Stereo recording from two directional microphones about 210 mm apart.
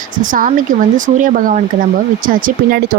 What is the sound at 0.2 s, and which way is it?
Speech, 40° right (ahead or behind).